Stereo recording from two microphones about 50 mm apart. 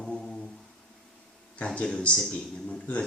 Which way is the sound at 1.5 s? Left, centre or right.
Left.